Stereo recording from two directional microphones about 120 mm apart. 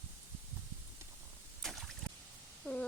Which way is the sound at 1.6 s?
Centre (ahead or behind).